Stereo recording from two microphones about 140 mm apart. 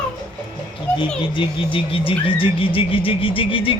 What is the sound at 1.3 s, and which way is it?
Music, 40° left (ahead or behind).